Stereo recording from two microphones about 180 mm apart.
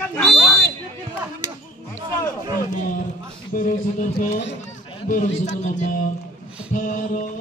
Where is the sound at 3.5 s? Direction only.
50° left (ahead or behind).